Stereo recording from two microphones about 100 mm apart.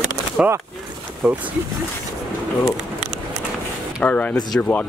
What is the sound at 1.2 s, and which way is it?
Speech, 15° right (ahead or behind).